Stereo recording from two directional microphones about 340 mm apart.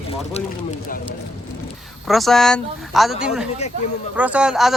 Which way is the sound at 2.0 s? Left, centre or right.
Centre.